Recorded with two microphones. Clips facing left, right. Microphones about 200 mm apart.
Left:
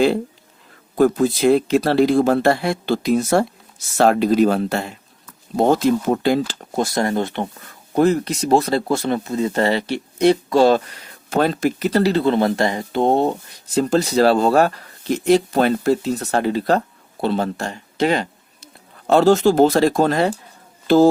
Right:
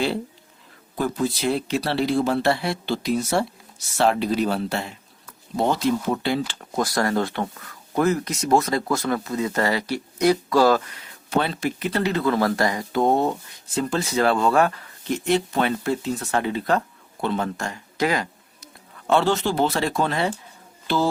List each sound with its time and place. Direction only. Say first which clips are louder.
0.9 s speech: left 8 dB; 50° left (ahead or behind)
6.7 s speech: left 2 dB; 25° left (ahead or behind)
11.3 s speech: left 5 dB; 45° left (ahead or behind)